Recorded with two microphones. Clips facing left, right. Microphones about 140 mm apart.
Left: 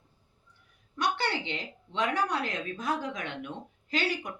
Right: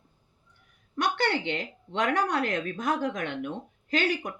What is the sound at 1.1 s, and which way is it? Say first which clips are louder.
A woman's voice: right 5 dB; 55° right (ahead or behind).